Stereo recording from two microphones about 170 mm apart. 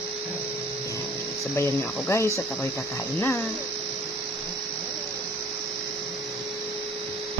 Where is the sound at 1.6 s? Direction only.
15° left (ahead or behind).